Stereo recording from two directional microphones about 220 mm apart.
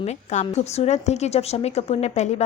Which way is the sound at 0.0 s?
30° left (ahead or behind).